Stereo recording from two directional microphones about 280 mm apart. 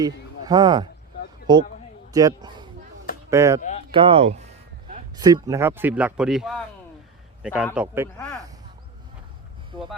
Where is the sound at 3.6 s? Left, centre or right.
Left.